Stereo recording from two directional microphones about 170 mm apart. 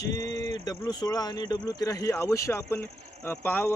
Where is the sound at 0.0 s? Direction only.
20° left (ahead or behind).